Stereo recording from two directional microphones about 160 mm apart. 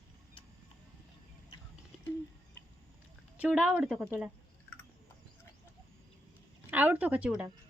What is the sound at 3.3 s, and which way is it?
Speech, 10° right (ahead or behind).